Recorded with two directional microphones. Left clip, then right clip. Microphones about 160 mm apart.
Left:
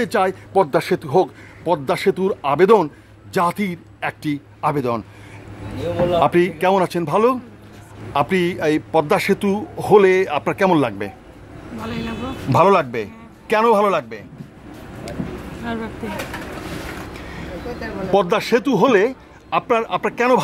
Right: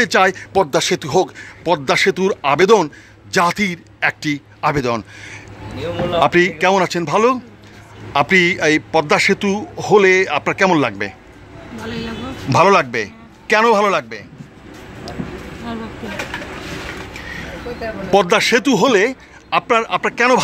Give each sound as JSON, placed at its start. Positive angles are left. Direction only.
{"t": 0.0, "sound": "a man's voice", "side_deg": 0}
{"t": 15.6, "sound": "speech", "side_deg": 5}
{"t": 18.1, "sound": "speech", "side_deg": -5}
{"t": 19.5, "sound": "a man's voice", "side_deg": 5}